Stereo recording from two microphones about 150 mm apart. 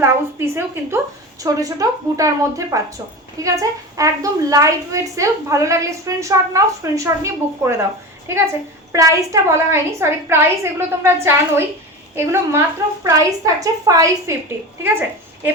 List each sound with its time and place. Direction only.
0.0 s a woman's voice: 15° right (ahead or behind)
8.9 s a woman's voice: 20° right (ahead or behind)